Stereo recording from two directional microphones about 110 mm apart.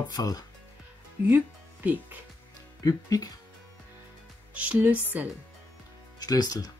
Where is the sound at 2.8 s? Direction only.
35° left (ahead or behind).